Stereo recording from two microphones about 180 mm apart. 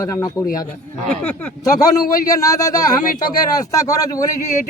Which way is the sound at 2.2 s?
20° left (ahead or behind).